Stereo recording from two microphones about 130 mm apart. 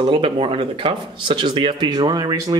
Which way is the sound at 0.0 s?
40° right (ahead or behind).